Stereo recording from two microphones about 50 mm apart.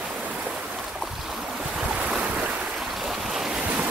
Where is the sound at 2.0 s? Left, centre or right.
Centre.